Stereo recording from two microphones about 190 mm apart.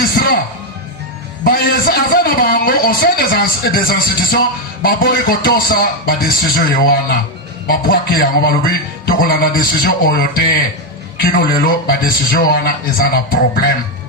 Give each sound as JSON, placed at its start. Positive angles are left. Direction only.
{"t": 0.2, "sound": "music", "side_deg": 50}
{"t": 1.5, "sound": "a man's voice", "side_deg": 50}